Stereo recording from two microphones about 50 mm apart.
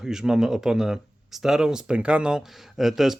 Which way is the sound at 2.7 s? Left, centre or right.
Centre.